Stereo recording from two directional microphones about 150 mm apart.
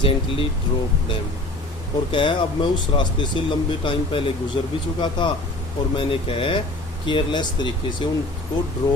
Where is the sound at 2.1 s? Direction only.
35° left (ahead or behind).